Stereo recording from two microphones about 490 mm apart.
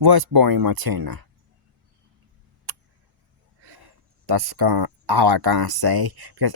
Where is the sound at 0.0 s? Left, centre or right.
Right.